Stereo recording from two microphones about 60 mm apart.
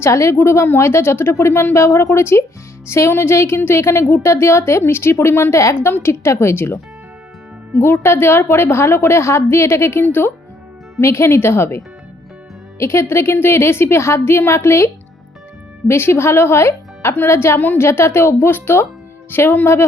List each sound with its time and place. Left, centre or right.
0.0 s speech: left
7.8 s speech: left
11.0 s speech: left
12.8 s speech: left
15.9 s speech: left
17.6 s speech: left
17.8 s speech: left